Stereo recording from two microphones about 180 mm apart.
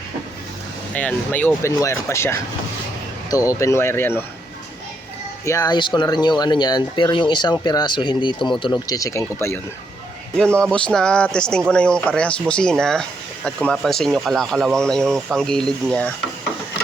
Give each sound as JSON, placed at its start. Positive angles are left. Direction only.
{"t": 0.9, "sound": "speech", "side_deg": 10}
{"t": 5.5, "sound": "speech", "side_deg": 20}
{"t": 10.3, "sound": "speech", "side_deg": 5}